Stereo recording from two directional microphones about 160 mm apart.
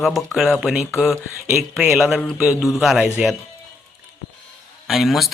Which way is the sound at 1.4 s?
15° right (ahead or behind).